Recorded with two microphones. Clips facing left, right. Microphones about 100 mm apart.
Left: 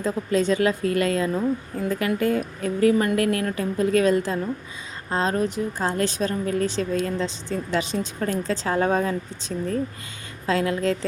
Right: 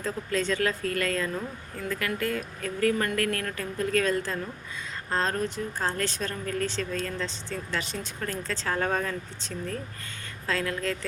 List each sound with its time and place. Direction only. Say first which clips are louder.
0.0 s a woman's voice: left 7 dB; 20° left (ahead or behind)